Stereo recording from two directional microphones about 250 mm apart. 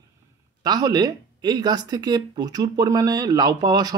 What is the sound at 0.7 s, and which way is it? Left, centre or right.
Speech, centre.